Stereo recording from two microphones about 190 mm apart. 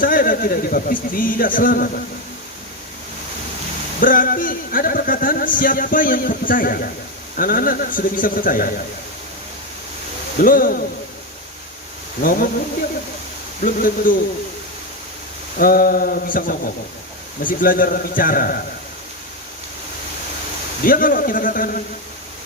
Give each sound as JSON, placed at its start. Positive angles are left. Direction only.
{"t": 0.0, "sound": "speech", "side_deg": 45}
{"t": 4.0, "sound": "speech", "side_deg": 45}
{"t": 10.3, "sound": "speech", "side_deg": 45}
{"t": 12.2, "sound": "speech", "side_deg": 50}
{"t": 14.1, "sound": "speech", "side_deg": 45}
{"t": 15.5, "sound": "speech", "side_deg": 50}
{"t": 20.8, "sound": "speech", "side_deg": 50}